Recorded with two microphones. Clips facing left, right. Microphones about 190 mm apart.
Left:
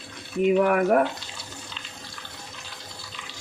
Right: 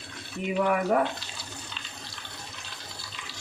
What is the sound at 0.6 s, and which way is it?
Speech, 55° left (ahead or behind).